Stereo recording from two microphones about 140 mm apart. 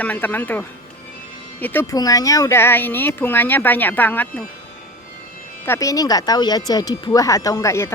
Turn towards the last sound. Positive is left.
turn(degrees=20)  # may be behind; listen again after turning